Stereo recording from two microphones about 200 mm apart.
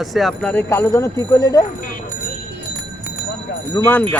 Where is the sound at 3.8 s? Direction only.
20° left (ahead or behind).